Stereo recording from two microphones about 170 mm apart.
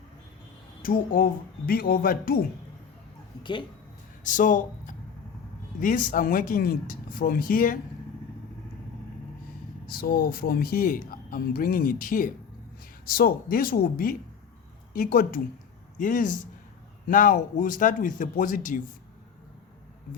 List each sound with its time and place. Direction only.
0.8 s speech: 55° left (ahead or behind)
4.2 s speech: 50° left (ahead or behind)
9.8 s speech: 55° left (ahead or behind)